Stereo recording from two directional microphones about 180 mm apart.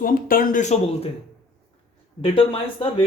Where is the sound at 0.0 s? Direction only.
50° left (ahead or behind).